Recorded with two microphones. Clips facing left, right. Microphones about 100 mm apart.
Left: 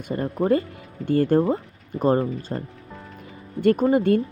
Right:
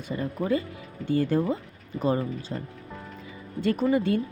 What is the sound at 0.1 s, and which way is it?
Speech, 40° left (ahead or behind).